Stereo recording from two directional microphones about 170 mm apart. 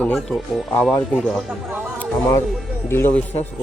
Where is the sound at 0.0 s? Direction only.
10° left (ahead or behind).